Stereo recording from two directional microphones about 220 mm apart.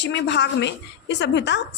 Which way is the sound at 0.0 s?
50° left (ahead or behind).